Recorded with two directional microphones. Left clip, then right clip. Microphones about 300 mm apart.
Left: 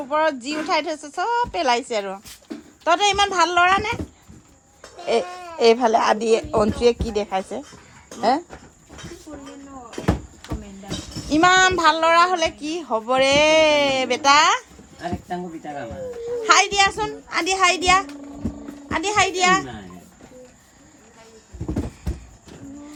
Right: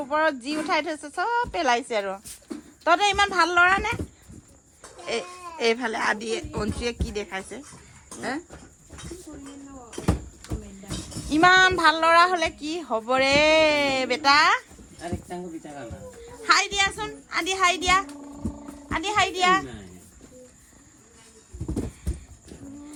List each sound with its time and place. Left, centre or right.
0.0 s a woman's voice: centre
5.0 s speech: centre
11.3 s a woman's voice: centre
16.4 s a woman's voice: centre